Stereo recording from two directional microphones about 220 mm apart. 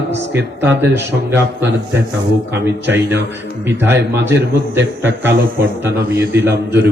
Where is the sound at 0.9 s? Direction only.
10° right (ahead or behind).